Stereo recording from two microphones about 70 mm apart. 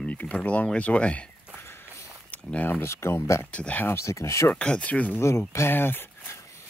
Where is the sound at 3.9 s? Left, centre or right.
Left.